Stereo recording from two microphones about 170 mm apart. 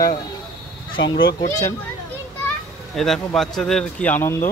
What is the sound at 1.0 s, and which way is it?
Speech, 90° left.